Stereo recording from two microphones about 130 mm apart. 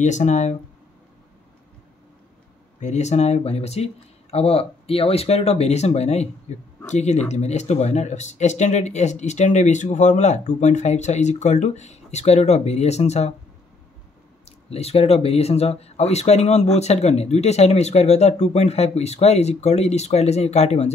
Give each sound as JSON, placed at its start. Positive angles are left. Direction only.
{"t": 0.0, "sound": "speech", "side_deg": 65}
{"t": 2.8, "sound": "speech", "side_deg": 60}
{"t": 14.4, "sound": "speech", "side_deg": 55}